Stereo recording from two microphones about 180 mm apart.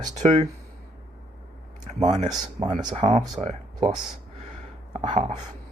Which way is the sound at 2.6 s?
40° right (ahead or behind).